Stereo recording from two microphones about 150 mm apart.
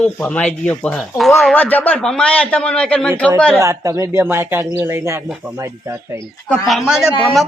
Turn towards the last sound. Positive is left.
turn(degrees=-5)  # may be behind; listen again after turning